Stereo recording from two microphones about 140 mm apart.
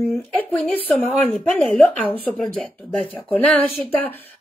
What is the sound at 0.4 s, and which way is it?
A woman's voice, 10° left (ahead or behind).